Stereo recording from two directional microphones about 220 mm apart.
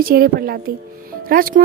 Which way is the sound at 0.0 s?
40° right (ahead or behind).